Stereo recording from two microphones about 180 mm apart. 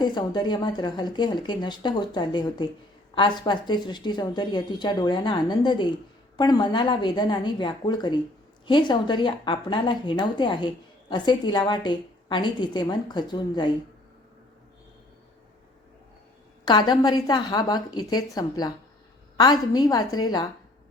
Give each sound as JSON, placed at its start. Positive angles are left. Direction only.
{"t": 0.0, "sound": "speech", "side_deg": 25}
{"t": 16.6, "sound": "speech", "side_deg": 25}